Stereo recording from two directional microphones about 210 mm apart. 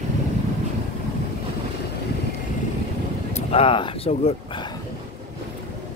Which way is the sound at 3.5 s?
25° left (ahead or behind).